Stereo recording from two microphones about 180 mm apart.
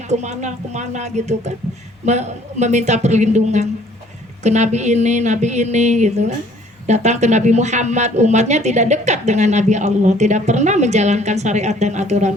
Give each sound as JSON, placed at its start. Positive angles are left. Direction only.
{"t": 0.1, "sound": "speech", "side_deg": -40}